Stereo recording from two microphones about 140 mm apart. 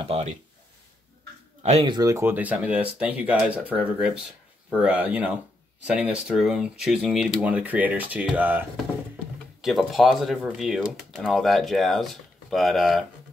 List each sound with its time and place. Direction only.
0.0 s a sound: 45° right (ahead or behind)
1.6 s speech: 50° right (ahead or behind)
1.9 s speech: 25° right (ahead or behind); by 3.8 s 10° right (ahead or behind)
4.8 s speech: 10° right (ahead or behind)
9.6 s speech: centre (ahead or behind)